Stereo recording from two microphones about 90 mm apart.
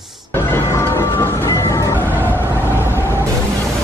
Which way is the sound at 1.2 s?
25° left (ahead or behind).